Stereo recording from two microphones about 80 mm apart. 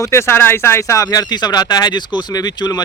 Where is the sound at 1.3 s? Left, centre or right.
Left.